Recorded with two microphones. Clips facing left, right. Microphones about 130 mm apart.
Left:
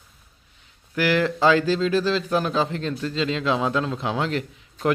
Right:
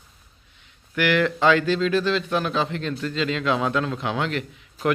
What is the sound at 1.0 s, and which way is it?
Speech, 35° left (ahead or behind).